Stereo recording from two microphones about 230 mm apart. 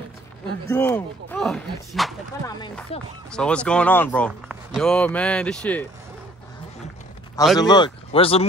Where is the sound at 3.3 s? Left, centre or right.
Centre.